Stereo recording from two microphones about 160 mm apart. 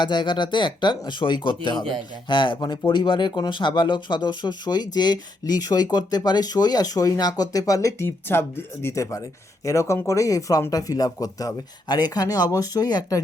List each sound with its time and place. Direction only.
0.0 s speech: 30° left (ahead or behind)